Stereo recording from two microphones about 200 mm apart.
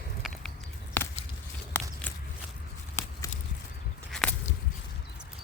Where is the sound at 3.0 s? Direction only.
15° left (ahead or behind).